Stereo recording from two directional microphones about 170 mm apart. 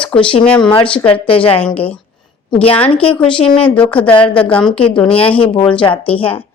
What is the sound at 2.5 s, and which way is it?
A woman's voice, 35° left (ahead or behind).